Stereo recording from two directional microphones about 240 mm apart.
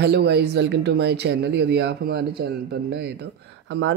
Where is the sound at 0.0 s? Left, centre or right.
Right.